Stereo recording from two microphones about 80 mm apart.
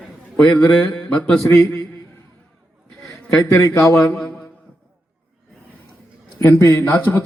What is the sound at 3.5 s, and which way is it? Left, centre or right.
Speech, left.